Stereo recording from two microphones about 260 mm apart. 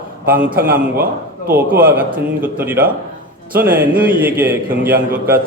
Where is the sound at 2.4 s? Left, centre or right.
Centre.